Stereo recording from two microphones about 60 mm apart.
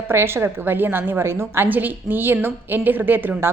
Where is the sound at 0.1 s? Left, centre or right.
Right.